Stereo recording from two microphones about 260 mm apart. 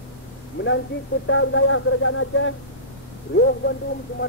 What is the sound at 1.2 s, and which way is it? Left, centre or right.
Speech, left.